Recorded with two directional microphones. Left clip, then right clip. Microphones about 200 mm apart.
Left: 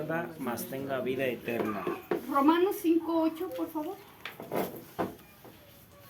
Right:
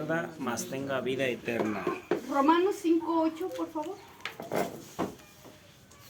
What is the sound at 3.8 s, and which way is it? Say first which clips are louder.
Speech: even; 25° left (ahead or behind).